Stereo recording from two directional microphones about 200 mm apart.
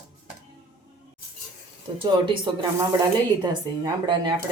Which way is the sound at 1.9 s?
25° right (ahead or behind).